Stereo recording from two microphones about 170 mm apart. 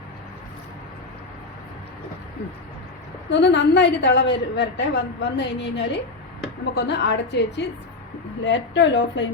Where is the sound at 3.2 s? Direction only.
90° left.